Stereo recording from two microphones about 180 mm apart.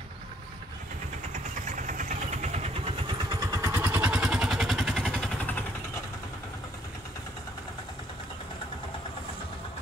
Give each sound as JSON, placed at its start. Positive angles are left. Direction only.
{"t": 1.3, "sound": "vehicle", "side_deg": -45}
{"t": 3.3, "sound": "vehicle", "side_deg": -20}